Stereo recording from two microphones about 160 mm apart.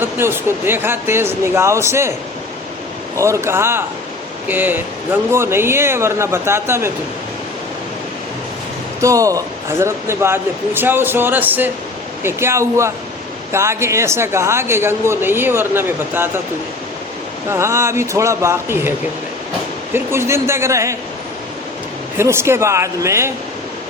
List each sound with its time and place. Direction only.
0.0 s speech: 15° right (ahead or behind)
3.2 s speech: 20° right (ahead or behind)
9.0 s speech: 20° right (ahead or behind)
17.5 s speech: 15° right (ahead or behind)
22.2 s speech: 15° right (ahead or behind)